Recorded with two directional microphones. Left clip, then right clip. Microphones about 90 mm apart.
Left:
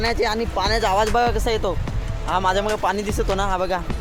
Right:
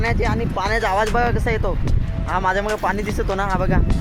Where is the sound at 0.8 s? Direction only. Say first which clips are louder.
Even; 25° left (ahead or behind).